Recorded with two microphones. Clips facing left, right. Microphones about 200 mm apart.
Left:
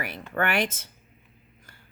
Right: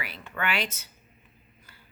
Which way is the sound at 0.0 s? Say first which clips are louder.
Left 5 dB; 50° left (ahead or behind).